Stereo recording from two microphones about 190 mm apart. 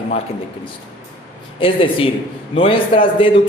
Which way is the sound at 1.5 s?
25° left (ahead or behind).